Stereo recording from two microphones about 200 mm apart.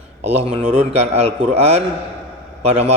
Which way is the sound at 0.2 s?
30° right (ahead or behind).